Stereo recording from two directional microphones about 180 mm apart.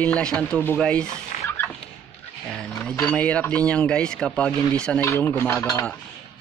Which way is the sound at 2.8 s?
5° left (ahead or behind).